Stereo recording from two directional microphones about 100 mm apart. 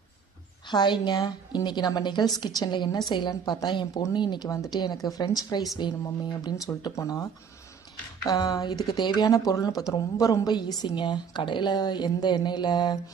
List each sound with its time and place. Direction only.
0.7 s speech: 45° left (ahead or behind)
7.0 s speech: 35° left (ahead or behind)
8.3 s speech: 40° left (ahead or behind)